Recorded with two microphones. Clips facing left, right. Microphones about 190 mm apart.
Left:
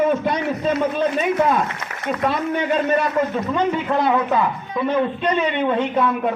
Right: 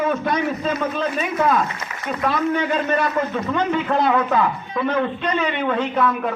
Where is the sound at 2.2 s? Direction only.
20° left (ahead or behind).